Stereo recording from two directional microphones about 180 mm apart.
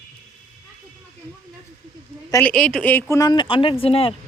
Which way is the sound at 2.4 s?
5° left (ahead or behind).